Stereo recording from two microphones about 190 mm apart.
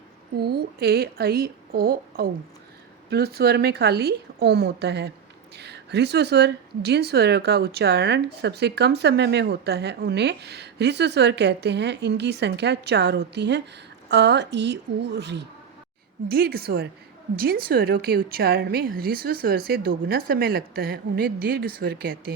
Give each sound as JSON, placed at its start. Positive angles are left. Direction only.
{"t": 0.4, "sound": "speech", "side_deg": -55}
{"t": 16.3, "sound": "a woman's voice", "side_deg": -55}